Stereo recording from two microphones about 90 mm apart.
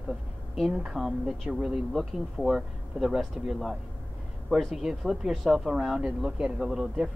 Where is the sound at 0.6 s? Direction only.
5° right (ahead or behind).